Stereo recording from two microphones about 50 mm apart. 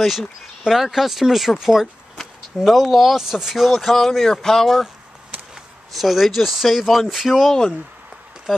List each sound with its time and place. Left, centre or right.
0.7 s speech: centre
5.9 s speech: centre